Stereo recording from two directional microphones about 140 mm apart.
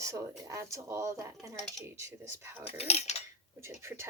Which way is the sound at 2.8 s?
45° left (ahead or behind).